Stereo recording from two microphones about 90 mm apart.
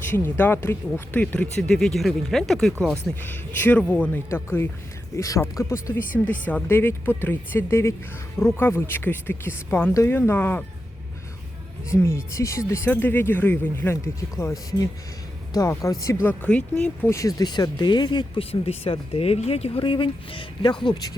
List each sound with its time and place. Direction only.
0.0 s speech: 25° left (ahead or behind); by 3.2 s 5° left (ahead or behind)
3.2 s speech: 20° left (ahead or behind)
4.3 s speech: 25° left (ahead or behind)
6.2 s speech: 15° left (ahead or behind)
11.9 s speech: 30° left (ahead or behind)
16.2 s speech: 15° left (ahead or behind)
17.0 s speech: 35° left (ahead or behind); by 20.7 s 65° left (ahead or behind)
20.9 s speech: 45° left (ahead or behind)